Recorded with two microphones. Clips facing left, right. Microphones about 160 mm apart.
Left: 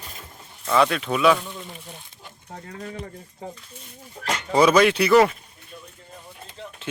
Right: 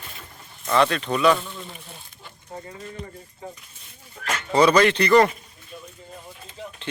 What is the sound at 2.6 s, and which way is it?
Speech, 75° left (ahead or behind).